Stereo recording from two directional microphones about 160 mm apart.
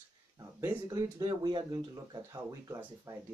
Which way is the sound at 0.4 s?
20° right (ahead or behind).